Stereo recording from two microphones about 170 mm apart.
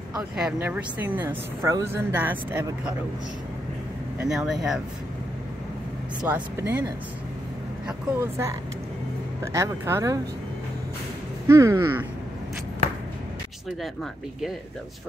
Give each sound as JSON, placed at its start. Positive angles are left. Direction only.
{"t": 0.1, "sound": "speech", "side_deg": -5}
{"t": 4.2, "sound": "speech", "side_deg": -5}
{"t": 6.2, "sound": "speech", "side_deg": -10}
{"t": 8.2, "sound": "speech", "side_deg": -15}
{"t": 11.4, "sound": "speech", "side_deg": -15}